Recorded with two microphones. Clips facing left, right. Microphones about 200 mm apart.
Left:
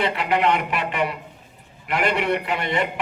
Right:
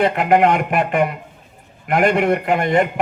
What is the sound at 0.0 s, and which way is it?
A man's voice, 50° right (ahead or behind).